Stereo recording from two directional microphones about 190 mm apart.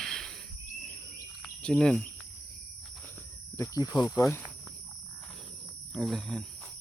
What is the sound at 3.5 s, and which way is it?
Speech, 15° left (ahead or behind).